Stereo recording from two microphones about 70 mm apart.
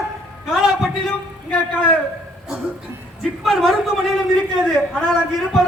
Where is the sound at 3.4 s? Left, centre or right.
Centre.